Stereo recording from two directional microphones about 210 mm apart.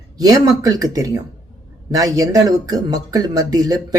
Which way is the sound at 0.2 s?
15° right (ahead or behind).